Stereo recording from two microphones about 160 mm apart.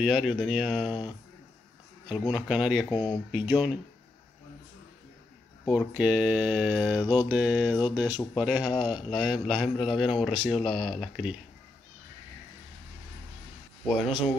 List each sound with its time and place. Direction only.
0.0 s a man's voice: 5° right (ahead or behind)
2.0 s a man's voice: 5° right (ahead or behind)
5.9 s mantra: 5° right (ahead or behind)
8.4 s a man's voice: 5° right (ahead or behind)
13.8 s a man's voice: centre (ahead or behind)